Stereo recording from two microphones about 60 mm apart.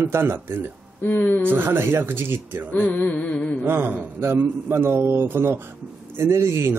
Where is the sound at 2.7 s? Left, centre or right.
Left.